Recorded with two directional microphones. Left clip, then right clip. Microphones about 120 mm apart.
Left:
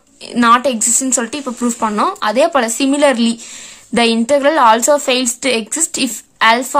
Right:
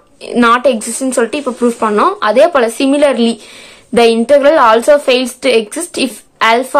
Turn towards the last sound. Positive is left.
turn(degrees=30)  # may be behind; listen again after turning